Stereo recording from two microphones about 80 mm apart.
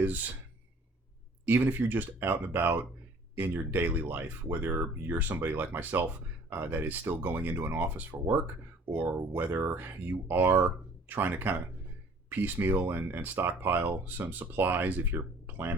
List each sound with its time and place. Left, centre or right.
1.5 s speech: right